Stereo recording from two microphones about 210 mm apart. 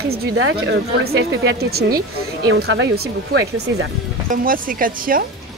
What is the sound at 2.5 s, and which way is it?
Speech, 65° right (ahead or behind).